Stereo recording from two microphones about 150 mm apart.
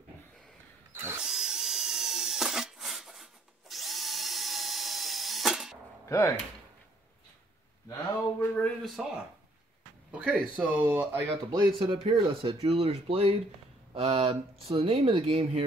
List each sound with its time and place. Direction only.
1.2 s drill: 5° right (ahead or behind)
6.0 s speech: 20° left (ahead or behind)
8.4 s speech: 10° left (ahead or behind)
10.1 s speech: 5° right (ahead or behind)
11.5 s speech: 35° right (ahead or behind)